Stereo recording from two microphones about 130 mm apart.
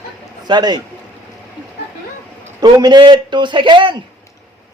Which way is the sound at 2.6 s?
35° right (ahead or behind).